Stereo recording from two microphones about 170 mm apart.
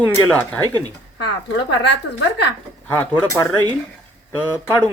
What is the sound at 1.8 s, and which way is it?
Speech, 90° left.